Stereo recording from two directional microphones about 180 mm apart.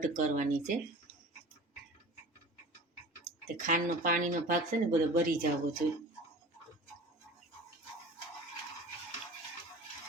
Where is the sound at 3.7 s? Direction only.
45° right (ahead or behind).